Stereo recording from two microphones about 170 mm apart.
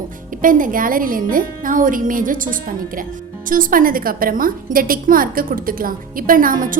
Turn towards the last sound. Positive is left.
turn(degrees=-55)  # may be behind; listen again after turning